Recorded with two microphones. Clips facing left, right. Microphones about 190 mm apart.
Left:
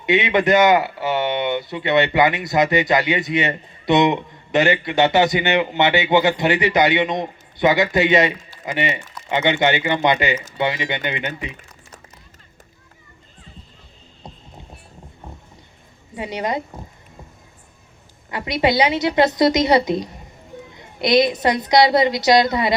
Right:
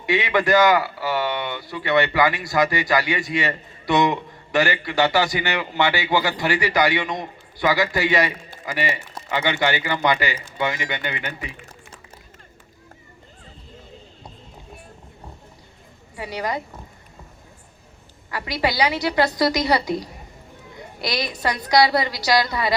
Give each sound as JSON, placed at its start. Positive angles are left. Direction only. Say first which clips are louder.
{"t": 0.0, "sound": "speech", "louder": "left 3 dB", "side_deg": 20}
{"t": 16.1, "sound": "speech", "louder": "left 3 dB", "side_deg": 20}
{"t": 18.3, "sound": "speech", "louder": "left 5 dB", "side_deg": 20}